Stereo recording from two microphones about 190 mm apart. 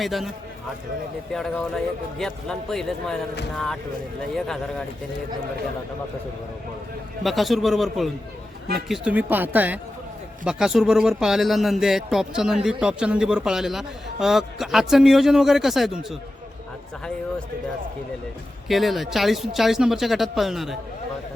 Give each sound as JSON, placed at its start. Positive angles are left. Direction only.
{"t": 0.0, "sound": "speech", "side_deg": 0}
{"t": 7.2, "sound": "speech", "side_deg": 0}
{"t": 18.7, "sound": "speech", "side_deg": 0}